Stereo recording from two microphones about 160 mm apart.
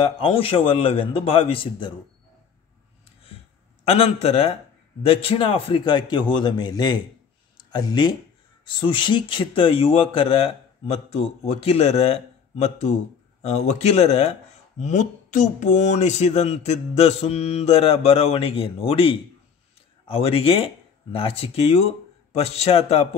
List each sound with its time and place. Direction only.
0.0 s speech: 35° left (ahead or behind)
3.8 s a man's voice: 40° left (ahead or behind)